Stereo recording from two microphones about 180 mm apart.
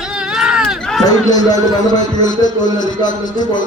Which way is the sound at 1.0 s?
20° left (ahead or behind).